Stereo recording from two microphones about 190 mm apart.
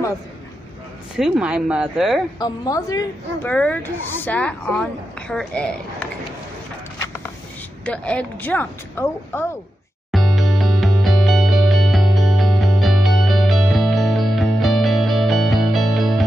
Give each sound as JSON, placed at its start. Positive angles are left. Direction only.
{"t": 1.1, "sound": "speech", "side_deg": -5}
{"t": 2.3, "sound": "a woman's voice", "side_deg": 20}
{"t": 3.5, "sound": "a woman's voice", "side_deg": 10}
{"t": 7.8, "sound": "a woman's voice", "side_deg": 5}
{"t": 10.1, "sound": "music", "side_deg": 0}